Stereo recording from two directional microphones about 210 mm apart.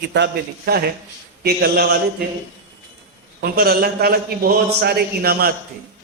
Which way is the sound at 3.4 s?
45° right (ahead or behind).